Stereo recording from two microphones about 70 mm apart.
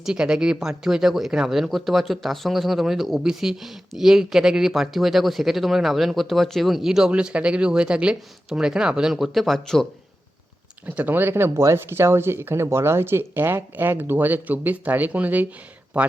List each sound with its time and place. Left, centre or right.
0.0 s speech: centre
10.8 s speech: right